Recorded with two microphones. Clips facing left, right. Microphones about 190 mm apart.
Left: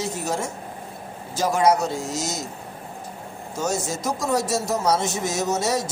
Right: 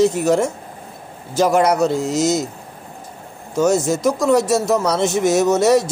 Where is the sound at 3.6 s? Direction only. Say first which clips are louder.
Right 10 dB; 65° right (ahead or behind).